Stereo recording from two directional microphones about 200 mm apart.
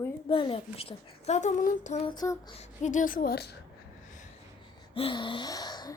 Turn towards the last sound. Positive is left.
turn(degrees=20)  # may be behind; listen again after turning